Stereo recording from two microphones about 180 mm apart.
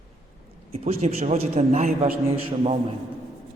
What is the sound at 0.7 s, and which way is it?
A man's voice, 35° right (ahead or behind).